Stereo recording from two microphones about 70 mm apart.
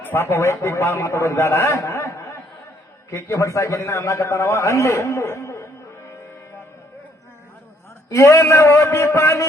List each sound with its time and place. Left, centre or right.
0.0 s a man's voice: left
8.1 s a man's voice: left